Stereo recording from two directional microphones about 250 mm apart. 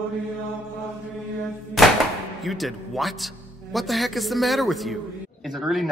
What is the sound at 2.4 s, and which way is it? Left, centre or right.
Speech, centre.